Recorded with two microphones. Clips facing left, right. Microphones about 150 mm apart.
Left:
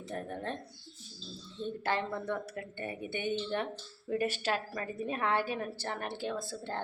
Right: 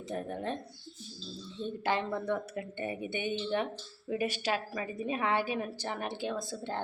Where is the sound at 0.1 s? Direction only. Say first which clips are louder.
Right 3 dB; 15° right (ahead or behind).